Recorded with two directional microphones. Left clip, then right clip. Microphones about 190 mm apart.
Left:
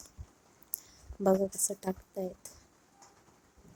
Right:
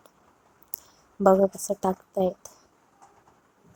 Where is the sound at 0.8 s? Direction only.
5° right (ahead or behind).